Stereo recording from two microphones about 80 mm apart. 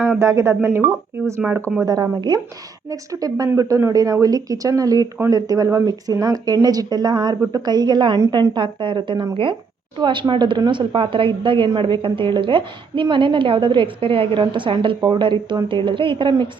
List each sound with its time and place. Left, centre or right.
0.2 s speech: right
1.8 s speech: right
2.9 s speech: right
10.0 s a woman's voice: right
10.7 s a woman's voice: right
15.0 s a woman's voice: right